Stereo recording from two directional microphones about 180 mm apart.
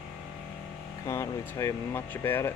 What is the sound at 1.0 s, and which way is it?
Speech, 15° left (ahead or behind).